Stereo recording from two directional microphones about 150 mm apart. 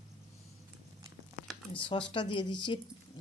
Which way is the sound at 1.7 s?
35° left (ahead or behind).